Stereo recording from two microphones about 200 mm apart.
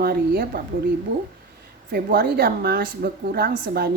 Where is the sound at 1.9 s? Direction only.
50° right (ahead or behind).